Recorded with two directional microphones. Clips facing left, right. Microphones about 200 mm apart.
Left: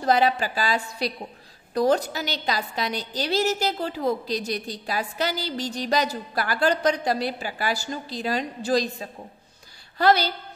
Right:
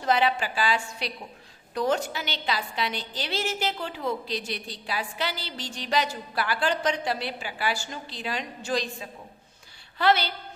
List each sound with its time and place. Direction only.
0.0 s a woman's voice: 40° left (ahead or behind)